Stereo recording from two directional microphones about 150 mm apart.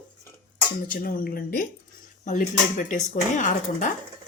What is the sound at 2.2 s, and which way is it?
Speech, 55° left (ahead or behind).